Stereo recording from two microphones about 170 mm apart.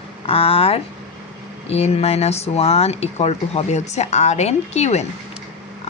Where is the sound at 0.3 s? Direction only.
35° left (ahead or behind).